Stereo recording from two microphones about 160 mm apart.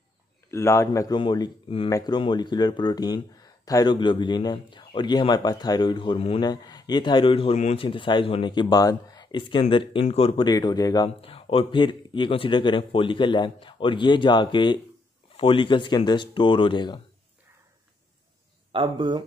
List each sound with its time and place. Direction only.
0.5 s speech: 15° left (ahead or behind)
11.1 s speech: 35° left (ahead or behind)
18.7 s speech: 30° right (ahead or behind)